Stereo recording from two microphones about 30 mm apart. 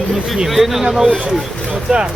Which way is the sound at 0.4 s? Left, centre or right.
Centre.